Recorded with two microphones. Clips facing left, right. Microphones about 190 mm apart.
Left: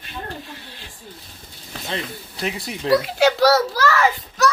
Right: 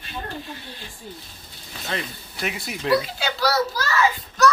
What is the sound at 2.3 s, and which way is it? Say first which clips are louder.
Speech: left 2 dB; 30° left (ahead or behind).